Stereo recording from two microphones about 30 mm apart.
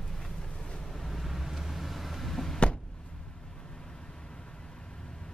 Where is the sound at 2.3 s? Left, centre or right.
Centre.